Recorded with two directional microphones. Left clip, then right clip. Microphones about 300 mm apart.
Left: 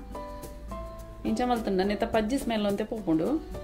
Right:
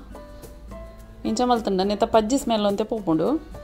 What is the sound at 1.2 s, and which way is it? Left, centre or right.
A woman's voice, right.